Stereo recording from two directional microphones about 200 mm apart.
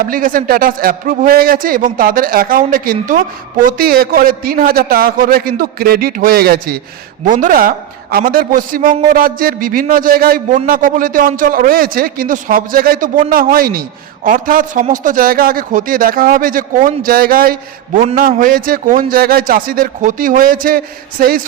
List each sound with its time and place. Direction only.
0.0 s a man's voice: 45° right (ahead or behind)